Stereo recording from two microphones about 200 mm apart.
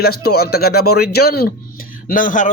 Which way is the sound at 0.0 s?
50° left (ahead or behind).